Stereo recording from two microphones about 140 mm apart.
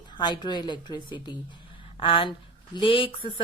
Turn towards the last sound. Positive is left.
turn(degrees=40)  # may be behind; listen again after turning